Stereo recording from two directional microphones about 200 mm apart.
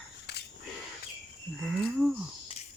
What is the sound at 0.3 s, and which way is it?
Camera, 55° left (ahead or behind).